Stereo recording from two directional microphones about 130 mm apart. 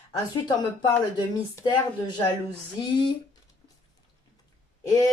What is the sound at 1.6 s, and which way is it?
Speech, 35° left (ahead or behind).